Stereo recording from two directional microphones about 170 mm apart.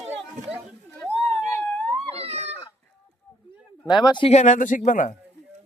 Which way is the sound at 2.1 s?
35° right (ahead or behind).